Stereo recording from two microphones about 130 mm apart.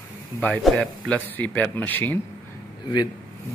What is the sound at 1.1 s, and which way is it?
Speech, 10° left (ahead or behind).